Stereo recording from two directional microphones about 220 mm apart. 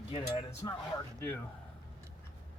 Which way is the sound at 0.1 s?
30° left (ahead or behind).